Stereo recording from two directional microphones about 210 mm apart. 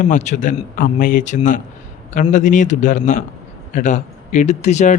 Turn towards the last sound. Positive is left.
turn(degrees=35)  # may be behind; listen again after turning